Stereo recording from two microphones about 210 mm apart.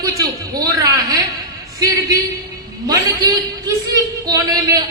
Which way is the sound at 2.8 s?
20° right (ahead or behind).